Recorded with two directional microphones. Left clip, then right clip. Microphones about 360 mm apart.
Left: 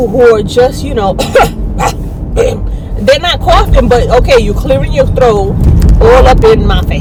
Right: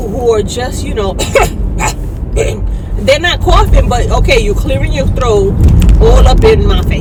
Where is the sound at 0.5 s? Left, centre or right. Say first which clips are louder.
Left 8 dB; centre.